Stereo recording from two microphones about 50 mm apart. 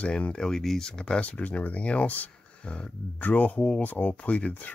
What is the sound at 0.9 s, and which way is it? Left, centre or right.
Speech, left.